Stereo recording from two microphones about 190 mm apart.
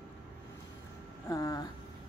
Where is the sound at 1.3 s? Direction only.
20° left (ahead or behind).